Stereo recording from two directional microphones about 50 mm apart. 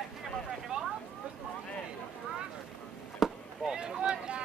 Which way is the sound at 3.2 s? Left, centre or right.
Centre.